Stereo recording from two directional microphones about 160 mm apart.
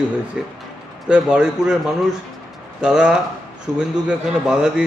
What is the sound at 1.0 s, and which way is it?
A man's voice, 5° right (ahead or behind).